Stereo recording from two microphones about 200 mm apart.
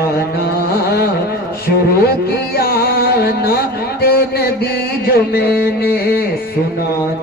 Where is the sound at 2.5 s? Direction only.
50° left (ahead or behind).